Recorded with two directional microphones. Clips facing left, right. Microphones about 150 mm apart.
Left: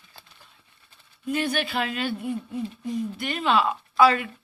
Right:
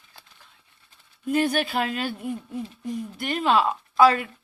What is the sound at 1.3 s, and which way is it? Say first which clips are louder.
Speech: right 3 dB; 45° right (ahead or behind).